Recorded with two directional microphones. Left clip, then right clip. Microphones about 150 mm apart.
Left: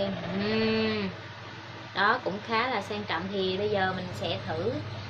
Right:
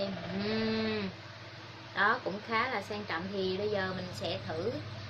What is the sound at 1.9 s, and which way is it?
A woman's voice, 5° right (ahead or behind).